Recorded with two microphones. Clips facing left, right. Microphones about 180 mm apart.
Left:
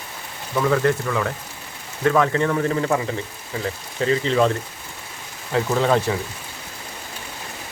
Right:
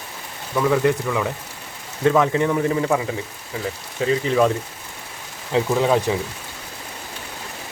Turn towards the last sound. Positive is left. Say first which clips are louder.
# right 1 dB
turn(degrees=-10)  # may be behind; listen again after turning